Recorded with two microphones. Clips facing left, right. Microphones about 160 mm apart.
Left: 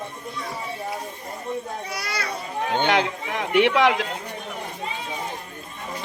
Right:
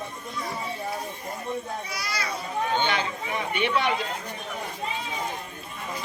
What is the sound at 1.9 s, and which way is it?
Children playing, 60° left (ahead or behind).